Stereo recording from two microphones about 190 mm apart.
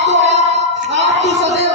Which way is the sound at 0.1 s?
40° right (ahead or behind).